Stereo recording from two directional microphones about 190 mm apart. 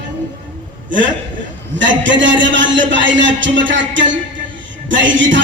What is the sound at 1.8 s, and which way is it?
Speech, 75° right (ahead or behind).